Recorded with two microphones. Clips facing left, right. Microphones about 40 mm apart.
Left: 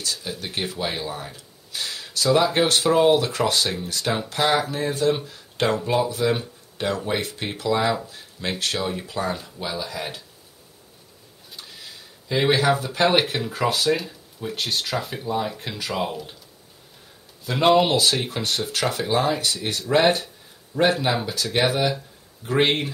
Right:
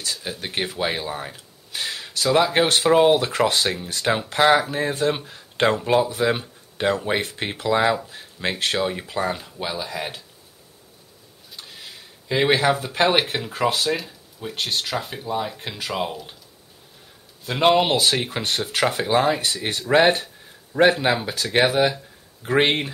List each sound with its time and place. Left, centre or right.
0.0 s speech: right
12.3 s speech: right
13.7 s speech: centre
17.5 s speech: centre; by 22.8 s right